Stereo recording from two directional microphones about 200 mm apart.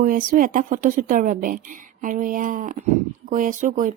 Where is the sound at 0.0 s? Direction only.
45° right (ahead or behind).